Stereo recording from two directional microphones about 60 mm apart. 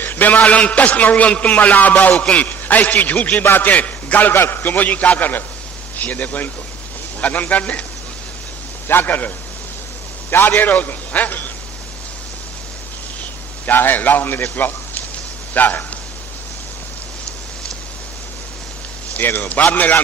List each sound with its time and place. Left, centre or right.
0.0 s a man's voice: left
4.4 s a man's voice: left
8.8 s a man's voice: left
10.3 s a man's voice: left
13.7 s a man's voice: left
19.1 s a man's voice: left